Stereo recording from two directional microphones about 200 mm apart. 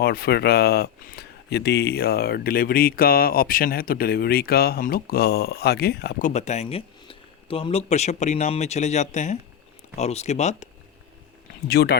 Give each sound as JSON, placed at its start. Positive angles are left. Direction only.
{"t": 0.0, "sound": "speech", "side_deg": 50}
{"t": 11.7, "sound": "speech", "side_deg": 50}